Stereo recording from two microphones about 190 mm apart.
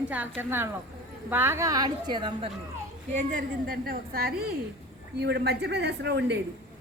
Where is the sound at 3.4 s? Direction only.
50° right (ahead or behind).